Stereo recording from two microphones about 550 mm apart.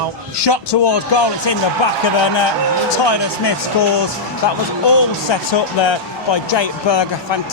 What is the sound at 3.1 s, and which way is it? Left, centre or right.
Speech, left.